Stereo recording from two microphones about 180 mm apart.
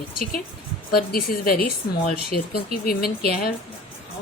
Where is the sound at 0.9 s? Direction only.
55° left (ahead or behind).